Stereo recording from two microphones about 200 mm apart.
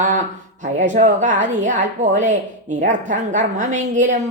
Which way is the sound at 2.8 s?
40° right (ahead or behind).